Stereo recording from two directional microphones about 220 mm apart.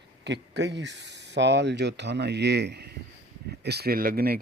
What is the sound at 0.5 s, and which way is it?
Speech, 50° right (ahead or behind).